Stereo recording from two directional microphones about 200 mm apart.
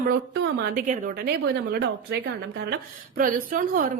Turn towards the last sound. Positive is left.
turn(degrees=-45)  # may be behind; listen again after turning